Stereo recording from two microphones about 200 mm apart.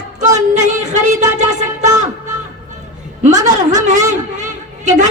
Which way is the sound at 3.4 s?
35° right (ahead or behind).